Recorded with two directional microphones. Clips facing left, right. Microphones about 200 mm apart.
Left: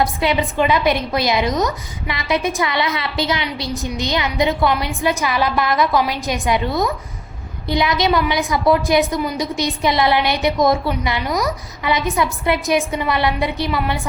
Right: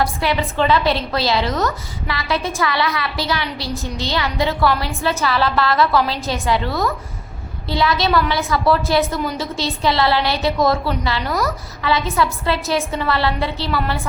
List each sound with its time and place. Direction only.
0.0 s a woman's voice: 20° left (ahead or behind)